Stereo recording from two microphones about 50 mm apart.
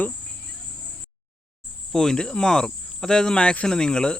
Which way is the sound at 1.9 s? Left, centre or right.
Centre.